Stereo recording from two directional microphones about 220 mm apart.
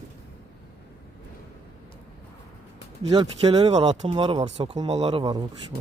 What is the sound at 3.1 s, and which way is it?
Speech, 20° right (ahead or behind).